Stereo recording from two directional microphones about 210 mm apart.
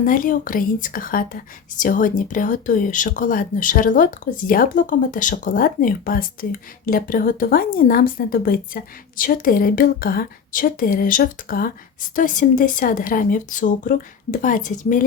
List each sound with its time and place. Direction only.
0.0 s speech: 40° left (ahead or behind)